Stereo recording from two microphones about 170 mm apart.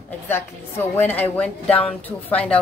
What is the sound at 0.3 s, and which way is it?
A woman's voice, 15° left (ahead or behind).